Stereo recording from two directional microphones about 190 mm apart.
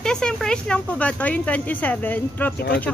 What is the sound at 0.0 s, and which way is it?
Speech, 5° left (ahead or behind).